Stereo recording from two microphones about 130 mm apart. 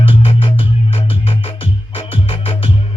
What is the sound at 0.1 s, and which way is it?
Music, 40° left (ahead or behind).